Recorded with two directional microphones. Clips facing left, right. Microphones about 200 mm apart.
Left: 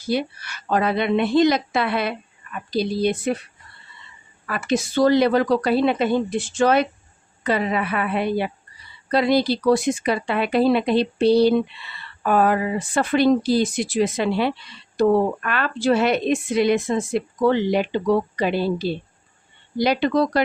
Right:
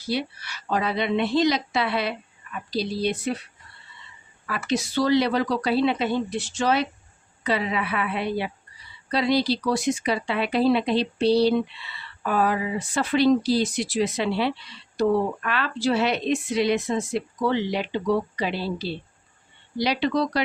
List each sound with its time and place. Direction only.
0.0 s speech: 50° left (ahead or behind)
4.4 s speech: 50° left (ahead or behind)